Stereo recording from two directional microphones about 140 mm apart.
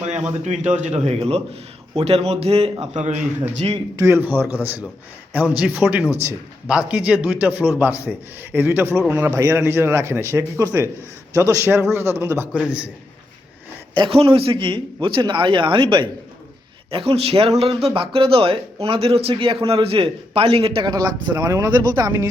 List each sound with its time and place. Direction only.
0.4 s a man's voice: 55° right (ahead or behind)
2.9 s a man's voice: 55° right (ahead or behind)
3.9 s a man's voice: 20° right (ahead or behind)
13.9 s a man's voice: 35° right (ahead or behind)
20.9 s speech: 25° right (ahead or behind)